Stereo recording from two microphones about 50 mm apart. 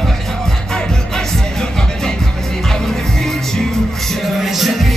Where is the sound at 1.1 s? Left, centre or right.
Centre.